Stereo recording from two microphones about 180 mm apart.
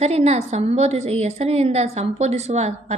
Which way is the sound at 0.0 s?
35° right (ahead or behind).